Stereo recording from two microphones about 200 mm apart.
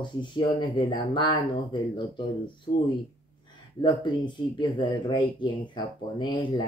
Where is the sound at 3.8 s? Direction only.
20° left (ahead or behind).